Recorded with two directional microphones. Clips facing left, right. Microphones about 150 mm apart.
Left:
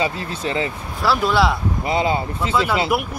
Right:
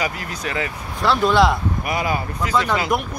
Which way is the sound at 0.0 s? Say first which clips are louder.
Left 3 dB; 25° left (ahead or behind).